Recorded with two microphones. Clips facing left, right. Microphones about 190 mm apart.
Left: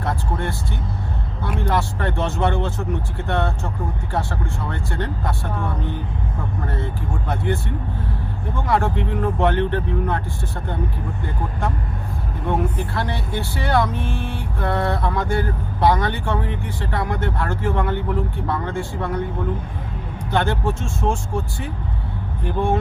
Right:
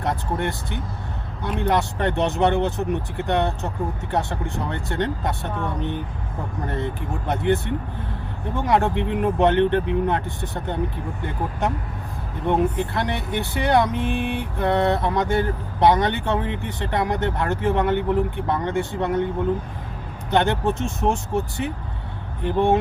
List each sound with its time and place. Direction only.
0.0 s vehicle: 20° right (ahead or behind)
1.5 s speech: 20° right (ahead or behind)
12.5 s speech: 20° right (ahead or behind)
20.3 s speech: 20° right (ahead or behind)